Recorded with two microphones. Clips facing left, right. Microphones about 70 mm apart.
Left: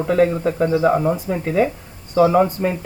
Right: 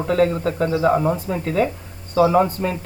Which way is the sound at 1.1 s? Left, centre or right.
Centre.